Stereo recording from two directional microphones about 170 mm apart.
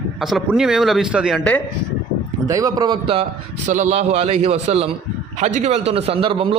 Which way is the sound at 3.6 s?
45° right (ahead or behind).